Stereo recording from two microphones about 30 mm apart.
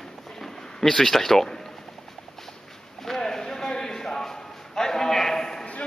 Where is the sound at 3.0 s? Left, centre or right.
Centre.